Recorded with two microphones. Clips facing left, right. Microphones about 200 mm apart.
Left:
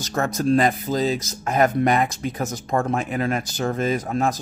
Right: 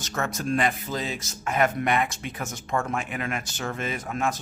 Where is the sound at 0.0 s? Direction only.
35° left (ahead or behind).